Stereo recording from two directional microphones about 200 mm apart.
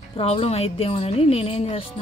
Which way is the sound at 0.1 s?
30° left (ahead or behind).